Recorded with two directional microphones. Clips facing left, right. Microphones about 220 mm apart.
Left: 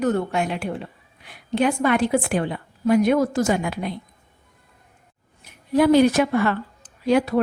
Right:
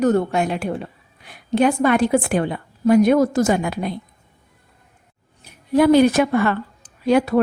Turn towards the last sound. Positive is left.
turn(degrees=-55)  # may be behind; listen again after turning